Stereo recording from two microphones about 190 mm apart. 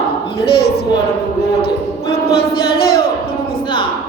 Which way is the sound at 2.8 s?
55° left (ahead or behind).